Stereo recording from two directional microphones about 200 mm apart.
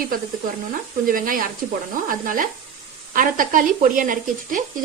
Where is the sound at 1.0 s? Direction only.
45° right (ahead or behind).